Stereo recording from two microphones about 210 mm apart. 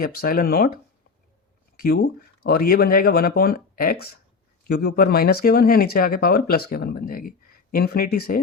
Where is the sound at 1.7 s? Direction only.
45° left (ahead or behind).